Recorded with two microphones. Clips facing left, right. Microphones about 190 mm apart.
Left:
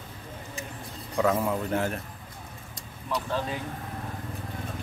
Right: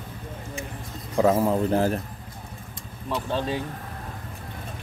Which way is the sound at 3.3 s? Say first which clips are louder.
Right 5 dB; 25° right (ahead or behind).